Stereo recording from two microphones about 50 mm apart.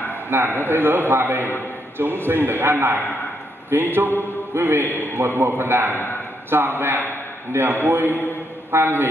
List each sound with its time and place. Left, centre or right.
0.3 s a man's voice: right